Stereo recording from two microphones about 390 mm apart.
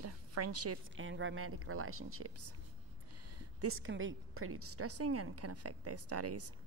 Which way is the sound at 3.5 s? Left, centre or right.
Right.